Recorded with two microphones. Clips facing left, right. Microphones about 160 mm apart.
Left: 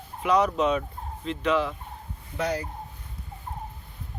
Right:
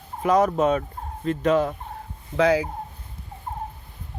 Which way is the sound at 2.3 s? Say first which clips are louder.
Right 9 dB; 90° right.